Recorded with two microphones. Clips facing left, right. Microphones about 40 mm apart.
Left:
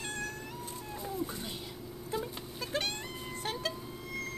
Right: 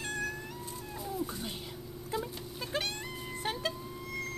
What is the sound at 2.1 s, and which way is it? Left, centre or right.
Goat, centre.